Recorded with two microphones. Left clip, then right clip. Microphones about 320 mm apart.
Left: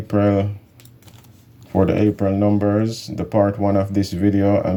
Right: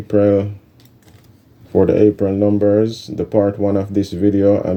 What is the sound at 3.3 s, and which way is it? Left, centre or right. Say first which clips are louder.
Speech: right 2 dB; centre.